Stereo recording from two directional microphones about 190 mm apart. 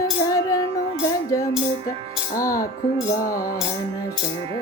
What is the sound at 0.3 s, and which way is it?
Music, 15° left (ahead or behind).